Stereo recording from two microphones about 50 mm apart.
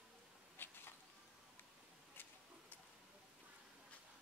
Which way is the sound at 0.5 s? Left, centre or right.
Left.